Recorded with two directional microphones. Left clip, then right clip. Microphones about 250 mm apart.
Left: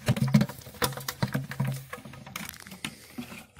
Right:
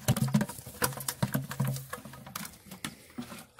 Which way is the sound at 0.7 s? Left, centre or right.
Left.